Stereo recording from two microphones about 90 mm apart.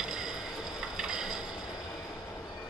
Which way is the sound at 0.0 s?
5° right (ahead or behind).